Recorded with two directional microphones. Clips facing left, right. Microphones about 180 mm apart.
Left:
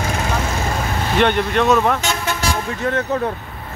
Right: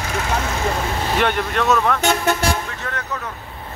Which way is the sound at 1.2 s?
5° right (ahead or behind).